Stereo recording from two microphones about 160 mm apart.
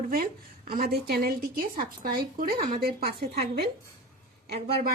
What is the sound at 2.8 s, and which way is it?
Speech, 75° right (ahead or behind).